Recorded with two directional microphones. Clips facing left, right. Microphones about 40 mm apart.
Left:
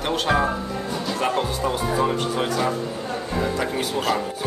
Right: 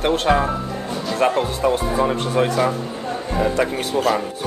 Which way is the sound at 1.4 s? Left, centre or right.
Right.